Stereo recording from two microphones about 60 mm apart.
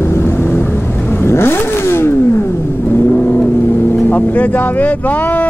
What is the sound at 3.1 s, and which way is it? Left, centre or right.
Vehicle, left.